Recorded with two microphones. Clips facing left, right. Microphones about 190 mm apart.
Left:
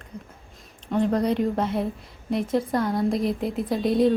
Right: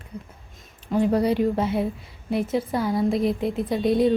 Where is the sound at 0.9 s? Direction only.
5° right (ahead or behind).